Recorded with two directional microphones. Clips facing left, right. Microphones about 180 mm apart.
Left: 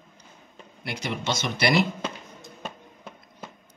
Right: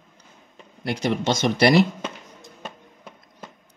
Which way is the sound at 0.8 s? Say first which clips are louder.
Right 8 dB; 45° right (ahead or behind).